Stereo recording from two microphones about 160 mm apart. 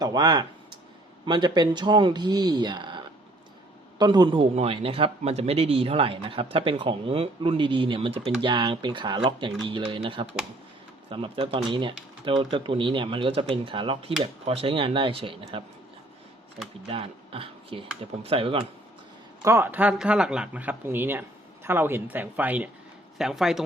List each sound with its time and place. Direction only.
0.0 s a man's voice: 25° right (ahead or behind)
16.8 s a man's voice: 35° right (ahead or behind)
19.4 s speech: 15° right (ahead or behind)